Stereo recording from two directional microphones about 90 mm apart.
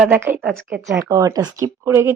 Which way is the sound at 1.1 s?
45° right (ahead or behind).